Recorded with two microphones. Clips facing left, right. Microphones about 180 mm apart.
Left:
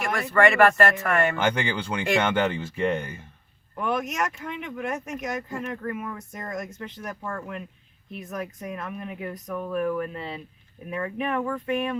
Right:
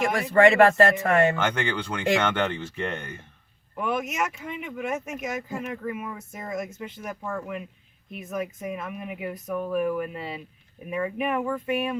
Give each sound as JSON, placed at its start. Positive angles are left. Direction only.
{"t": 0.0, "sound": "speech", "side_deg": -25}
{"t": 1.4, "sound": "speech", "side_deg": 10}